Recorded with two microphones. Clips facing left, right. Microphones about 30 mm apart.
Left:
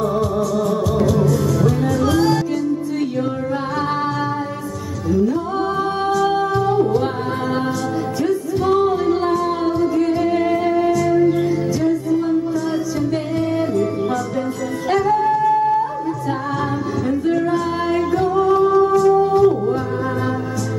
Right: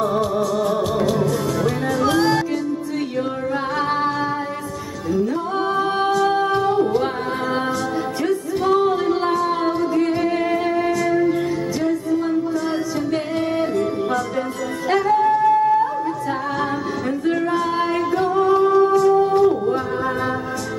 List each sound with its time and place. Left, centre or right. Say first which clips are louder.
0.0 s music: left 1 dB; right
5.8 s music: right 1 dB; centre
8.3 s music: left 1 dB; centre
13.1 s music: left 1 dB; centre
14.9 s singing: even; centre
17.3 s music: even; centre